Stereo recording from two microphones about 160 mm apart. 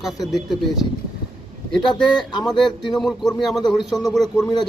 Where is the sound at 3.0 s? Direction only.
Centre (ahead or behind).